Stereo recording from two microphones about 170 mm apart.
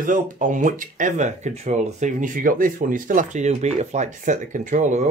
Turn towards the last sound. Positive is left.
turn(degrees=-45)  # may be behind; listen again after turning